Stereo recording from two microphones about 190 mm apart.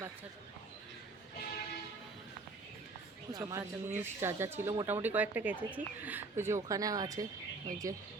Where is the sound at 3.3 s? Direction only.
20° right (ahead or behind).